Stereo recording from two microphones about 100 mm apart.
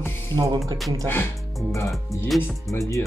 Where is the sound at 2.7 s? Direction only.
30° left (ahead or behind).